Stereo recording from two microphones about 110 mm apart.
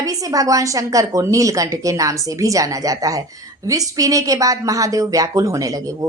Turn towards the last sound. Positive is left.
turn(degrees=-30)  # may be behind; listen again after turning